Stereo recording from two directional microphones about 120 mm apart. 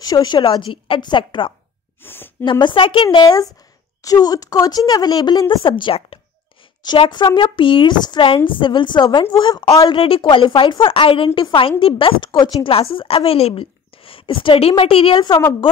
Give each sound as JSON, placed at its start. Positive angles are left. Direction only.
{"t": 0.0, "sound": "speech", "side_deg": 35}
{"t": 2.0, "sound": "a woman's voice", "side_deg": 15}
{"t": 2.6, "sound": "a woman's voice", "side_deg": 45}
{"t": 4.0, "sound": "speech", "side_deg": 30}
{"t": 5.7, "sound": "a woman's voice", "side_deg": 45}
{"t": 6.8, "sound": "speech", "side_deg": 35}
{"t": 9.8, "sound": "a woman's voice", "side_deg": 50}